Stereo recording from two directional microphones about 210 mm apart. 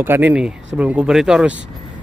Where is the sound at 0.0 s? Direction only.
10° right (ahead or behind).